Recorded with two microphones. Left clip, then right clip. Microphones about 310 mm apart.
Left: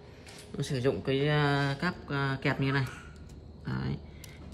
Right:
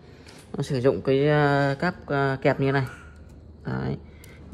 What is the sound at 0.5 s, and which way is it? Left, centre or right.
Speech, centre.